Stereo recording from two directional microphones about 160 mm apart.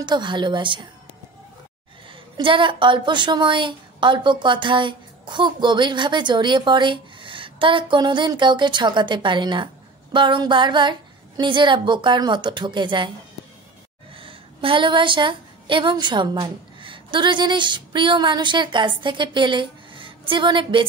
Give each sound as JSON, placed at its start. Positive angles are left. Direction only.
{"t": 0.0, "sound": "a woman's voice", "side_deg": -30}
{"t": 2.3, "sound": "a woman's voice", "side_deg": -30}
{"t": 14.1, "sound": "a woman's voice", "side_deg": -35}